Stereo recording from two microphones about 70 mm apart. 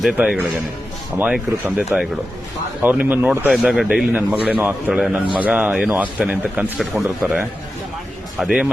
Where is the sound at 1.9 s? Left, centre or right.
Right.